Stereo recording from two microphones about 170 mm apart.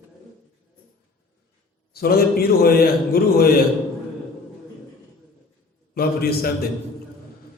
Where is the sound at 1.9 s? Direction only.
65° left (ahead or behind).